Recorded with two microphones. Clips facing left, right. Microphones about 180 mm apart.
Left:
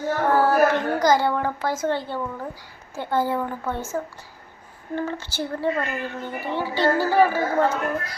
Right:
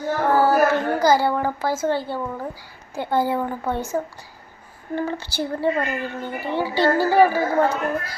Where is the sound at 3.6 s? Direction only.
35° right (ahead or behind).